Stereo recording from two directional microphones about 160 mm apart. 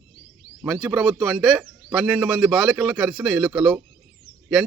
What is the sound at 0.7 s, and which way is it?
A man's voice, centre (ahead or behind).